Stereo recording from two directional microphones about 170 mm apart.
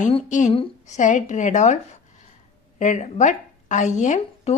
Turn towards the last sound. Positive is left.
turn(degrees=45)  # may be behind; listen again after turning